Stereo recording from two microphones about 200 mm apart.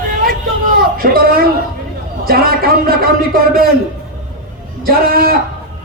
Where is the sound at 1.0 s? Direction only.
45° right (ahead or behind).